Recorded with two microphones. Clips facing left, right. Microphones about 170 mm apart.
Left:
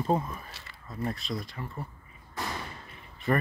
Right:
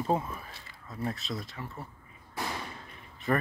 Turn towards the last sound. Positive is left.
turn(degrees=0)  # may be behind; listen again after turning